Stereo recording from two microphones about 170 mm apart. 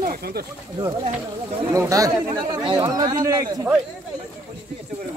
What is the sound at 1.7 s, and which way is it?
Speech, 20° right (ahead or behind).